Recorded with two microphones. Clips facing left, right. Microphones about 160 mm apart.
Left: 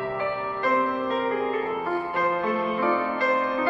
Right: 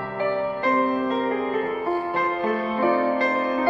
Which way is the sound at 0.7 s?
45° right (ahead or behind).